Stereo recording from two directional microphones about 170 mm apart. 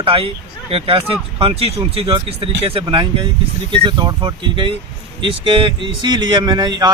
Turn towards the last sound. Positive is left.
turn(degrees=-25)  # may be behind; listen again after turning